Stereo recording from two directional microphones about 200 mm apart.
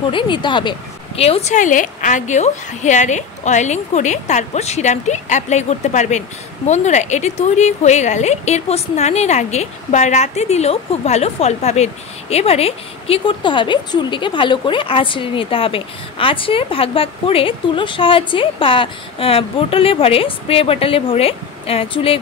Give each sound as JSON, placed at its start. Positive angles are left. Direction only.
{"t": 0.1, "sound": "a woman's voice", "side_deg": 25}